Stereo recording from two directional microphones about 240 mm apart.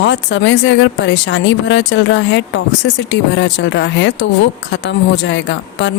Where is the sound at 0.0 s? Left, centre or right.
Left.